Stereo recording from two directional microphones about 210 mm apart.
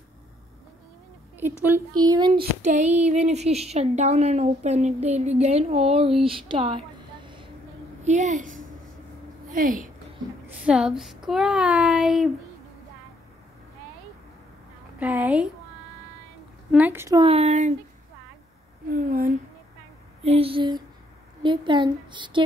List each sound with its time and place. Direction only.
2.0 s a woman's voice: 20° right (ahead or behind)
2.6 s a woman's voice: 35° right (ahead or behind)
8.0 s a woman's voice: 35° right (ahead or behind)
10.6 s speech: 5° right (ahead or behind)
15.0 s a woman's voice: 10° right (ahead or behind)
16.7 s a woman's voice: 10° right (ahead or behind)
17.2 s a woman's voice: 30° right (ahead or behind)
18.9 s a woman's voice: 40° right (ahead or behind)
20.2 s a woman's voice: 25° right (ahead or behind)